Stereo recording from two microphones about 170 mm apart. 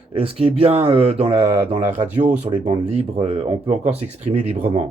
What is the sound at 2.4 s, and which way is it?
Speech, 35° right (ahead or behind).